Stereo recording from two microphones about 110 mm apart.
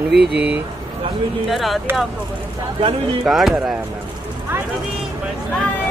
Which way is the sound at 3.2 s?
5° right (ahead or behind).